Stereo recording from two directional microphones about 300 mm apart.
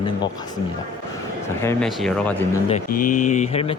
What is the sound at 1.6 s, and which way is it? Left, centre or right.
Speech, centre.